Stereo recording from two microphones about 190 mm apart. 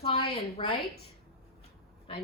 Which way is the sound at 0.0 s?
30° left (ahead or behind).